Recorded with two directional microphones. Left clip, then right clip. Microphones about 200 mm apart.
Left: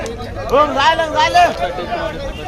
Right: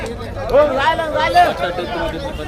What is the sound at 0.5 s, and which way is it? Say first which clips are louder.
Speech: left 1 dB; 55° left (ahead or behind).